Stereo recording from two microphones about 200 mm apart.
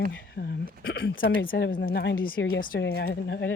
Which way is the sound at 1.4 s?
45° left (ahead or behind).